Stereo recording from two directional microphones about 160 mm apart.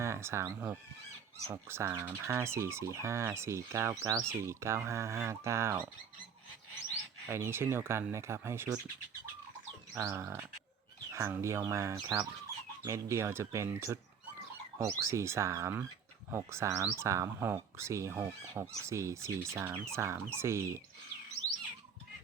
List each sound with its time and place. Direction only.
0.0 s speech: 15° right (ahead or behind)
7.3 s speech: 15° right (ahead or behind)
9.9 s speech: 15° right (ahead or behind)